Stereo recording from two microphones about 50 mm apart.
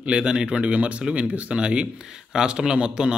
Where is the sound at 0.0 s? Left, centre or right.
Centre.